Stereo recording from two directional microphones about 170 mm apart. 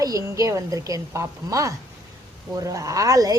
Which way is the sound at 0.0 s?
20° right (ahead or behind).